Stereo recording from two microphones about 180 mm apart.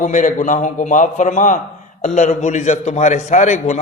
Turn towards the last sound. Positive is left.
turn(degrees=40)  # may be behind; listen again after turning